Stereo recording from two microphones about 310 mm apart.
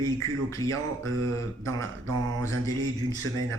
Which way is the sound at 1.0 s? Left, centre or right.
Right.